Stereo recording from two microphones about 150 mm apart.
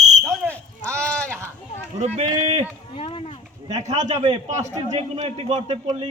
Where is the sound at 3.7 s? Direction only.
50° right (ahead or behind).